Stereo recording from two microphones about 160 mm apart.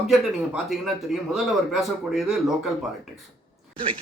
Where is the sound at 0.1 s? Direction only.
5° right (ahead or behind).